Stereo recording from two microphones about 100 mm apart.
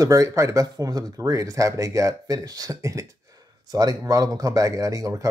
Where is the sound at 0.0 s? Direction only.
30° right (ahead or behind).